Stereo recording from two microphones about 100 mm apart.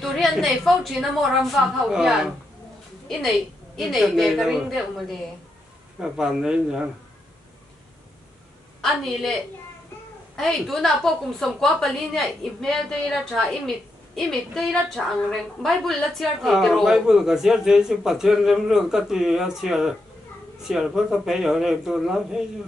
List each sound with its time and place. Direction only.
0.0 s a woman's voice: centre (ahead or behind)
10.3 s a woman's voice: 5° left (ahead or behind)